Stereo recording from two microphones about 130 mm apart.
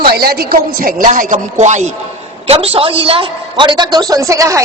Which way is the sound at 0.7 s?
90° right.